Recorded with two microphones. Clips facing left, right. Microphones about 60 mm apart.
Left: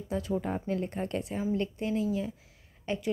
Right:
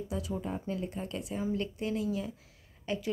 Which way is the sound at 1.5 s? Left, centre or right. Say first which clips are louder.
Left 4 dB; left.